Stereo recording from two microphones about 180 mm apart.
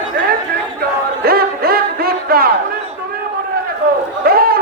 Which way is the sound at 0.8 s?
60° right (ahead or behind).